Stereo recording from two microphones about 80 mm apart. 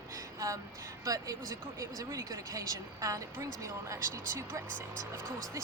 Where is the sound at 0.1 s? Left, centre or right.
Right.